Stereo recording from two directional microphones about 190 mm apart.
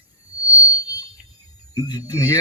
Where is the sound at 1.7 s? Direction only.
20° left (ahead or behind).